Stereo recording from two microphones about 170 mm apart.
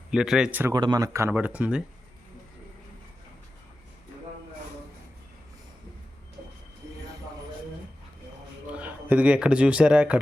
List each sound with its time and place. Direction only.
0.1 s speech: 5° right (ahead or behind)
0.7 s speech: 25° right (ahead or behind); by 1.8 s 10° right (ahead or behind)
8.7 s speech: 10° right (ahead or behind)